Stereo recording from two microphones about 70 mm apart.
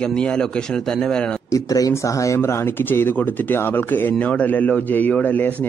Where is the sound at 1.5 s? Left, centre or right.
Left.